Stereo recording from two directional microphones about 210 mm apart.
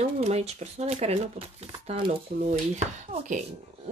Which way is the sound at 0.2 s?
30° right (ahead or behind).